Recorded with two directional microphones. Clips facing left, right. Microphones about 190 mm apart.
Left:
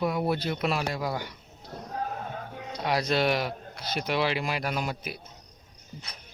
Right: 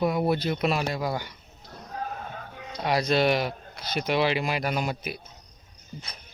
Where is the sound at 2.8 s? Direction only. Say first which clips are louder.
Right 2 dB; 10° right (ahead or behind).